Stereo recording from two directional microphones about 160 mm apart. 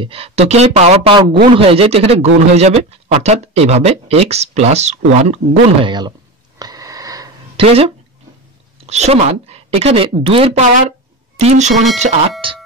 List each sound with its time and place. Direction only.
0.0 s a man's voice: 35° right (ahead or behind)
6.6 s wheeze: 25° right (ahead or behind)
7.5 s a woman's voice: 35° right (ahead or behind)
11.7 s speech: centre (ahead or behind)
12.0 s a man's voice: 40° right (ahead or behind)